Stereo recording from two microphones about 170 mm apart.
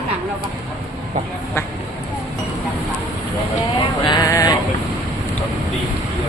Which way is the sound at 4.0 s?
25° left (ahead or behind).